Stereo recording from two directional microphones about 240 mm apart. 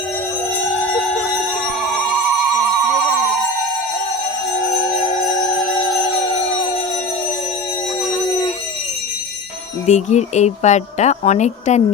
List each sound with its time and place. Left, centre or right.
9.8 s speech: left